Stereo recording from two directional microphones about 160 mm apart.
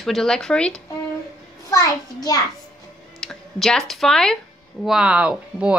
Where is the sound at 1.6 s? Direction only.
25° left (ahead or behind).